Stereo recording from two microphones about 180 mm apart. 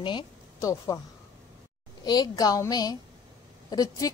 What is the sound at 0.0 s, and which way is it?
Speech, 20° left (ahead or behind).